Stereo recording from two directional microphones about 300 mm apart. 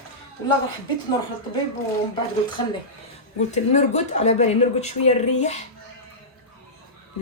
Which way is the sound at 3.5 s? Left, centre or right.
Left.